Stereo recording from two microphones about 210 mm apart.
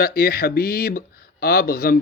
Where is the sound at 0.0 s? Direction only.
45° left (ahead or behind).